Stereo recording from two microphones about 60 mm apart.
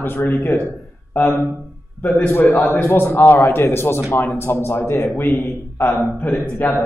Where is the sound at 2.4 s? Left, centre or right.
Left.